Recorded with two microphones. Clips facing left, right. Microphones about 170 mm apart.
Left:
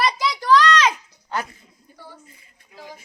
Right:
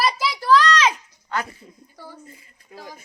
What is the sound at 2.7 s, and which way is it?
Speech, 50° right (ahead or behind).